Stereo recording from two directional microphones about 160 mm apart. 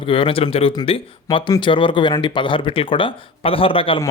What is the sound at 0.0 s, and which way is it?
Speech, 30° left (ahead or behind).